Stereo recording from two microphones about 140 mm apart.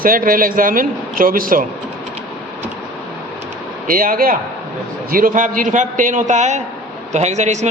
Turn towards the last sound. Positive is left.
turn(degrees=-55)  # may be behind; listen again after turning